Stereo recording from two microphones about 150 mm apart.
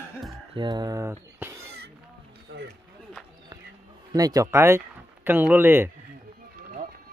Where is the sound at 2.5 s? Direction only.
90° right.